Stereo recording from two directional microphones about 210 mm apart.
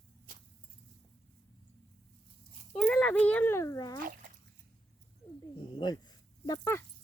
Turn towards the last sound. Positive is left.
turn(degrees=15)  # may be behind; listen again after turning